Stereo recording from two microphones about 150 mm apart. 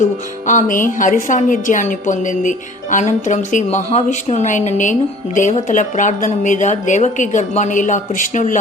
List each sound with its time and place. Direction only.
0.0 s a woman's voice: 60° left (ahead or behind)